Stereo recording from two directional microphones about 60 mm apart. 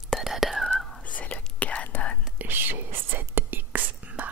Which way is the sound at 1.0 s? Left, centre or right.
Left.